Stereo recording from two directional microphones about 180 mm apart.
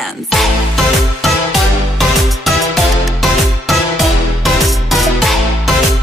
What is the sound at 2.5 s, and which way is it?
Music, centre (ahead or behind).